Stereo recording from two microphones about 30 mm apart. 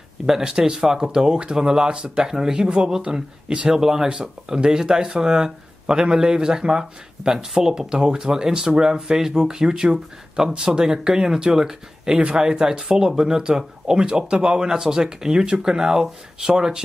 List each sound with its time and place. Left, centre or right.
0.4 s speech: right
4.1 s speech: right
14.7 s speech: centre